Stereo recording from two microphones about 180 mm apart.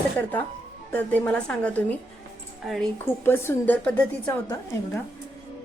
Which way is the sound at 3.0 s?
15° left (ahead or behind).